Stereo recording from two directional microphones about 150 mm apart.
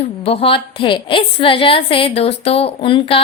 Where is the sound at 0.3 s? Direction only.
40° left (ahead or behind).